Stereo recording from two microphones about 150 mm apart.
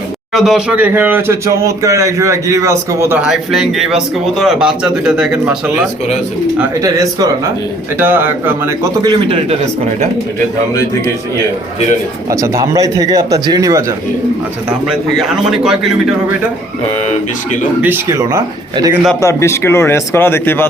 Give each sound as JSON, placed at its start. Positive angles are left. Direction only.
{"t": 0.3, "sound": "speech", "side_deg": -5}
{"t": 3.2, "sound": "speech", "side_deg": 0}
{"t": 6.8, "sound": "speech", "side_deg": -25}
{"t": 12.3, "sound": "speech", "side_deg": -20}
{"t": 14.8, "sound": "speech", "side_deg": 0}
{"t": 17.1, "sound": "speech", "side_deg": 60}
{"t": 17.8, "sound": "speech", "side_deg": -15}
{"t": 19.2, "sound": "speech", "side_deg": 20}